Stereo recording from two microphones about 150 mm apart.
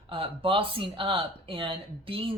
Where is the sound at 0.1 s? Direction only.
35° right (ahead or behind).